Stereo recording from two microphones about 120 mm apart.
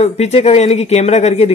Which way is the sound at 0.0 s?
65° left (ahead or behind).